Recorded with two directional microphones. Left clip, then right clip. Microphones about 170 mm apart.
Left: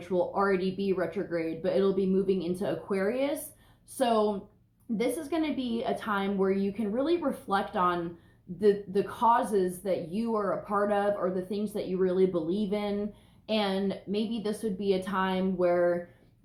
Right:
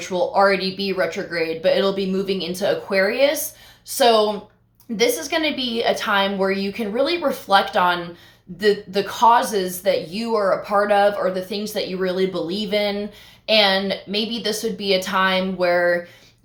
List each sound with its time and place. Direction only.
0.1 s speech: 15° right (ahead or behind)